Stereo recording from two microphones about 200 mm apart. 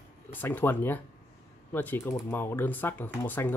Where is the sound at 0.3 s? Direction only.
10° left (ahead or behind).